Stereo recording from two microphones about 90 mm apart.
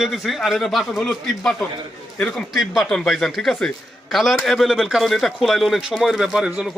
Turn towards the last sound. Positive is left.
turn(degrees=-5)  # may be behind; listen again after turning